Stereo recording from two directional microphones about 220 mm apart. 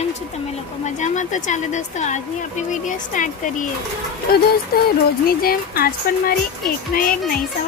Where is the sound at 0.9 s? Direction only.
35° left (ahead or behind).